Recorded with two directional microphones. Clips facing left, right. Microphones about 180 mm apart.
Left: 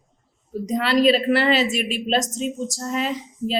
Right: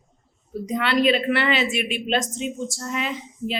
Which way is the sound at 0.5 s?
40° left (ahead or behind).